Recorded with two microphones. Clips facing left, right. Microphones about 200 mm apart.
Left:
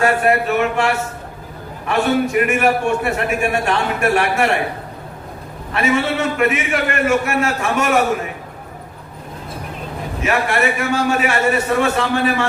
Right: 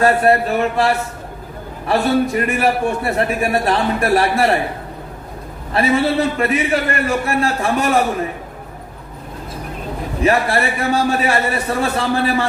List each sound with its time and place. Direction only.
0.0 s a man's voice: 35° right (ahead or behind)
5.7 s a man's voice: 35° right (ahead or behind)
10.2 s a man's voice: 35° right (ahead or behind)